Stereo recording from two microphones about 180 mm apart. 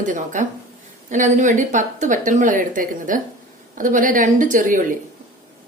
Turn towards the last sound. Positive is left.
turn(degrees=-45)  # may be behind; listen again after turning